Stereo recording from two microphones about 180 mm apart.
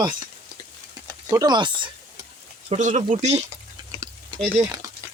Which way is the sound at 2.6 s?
40° right (ahead or behind).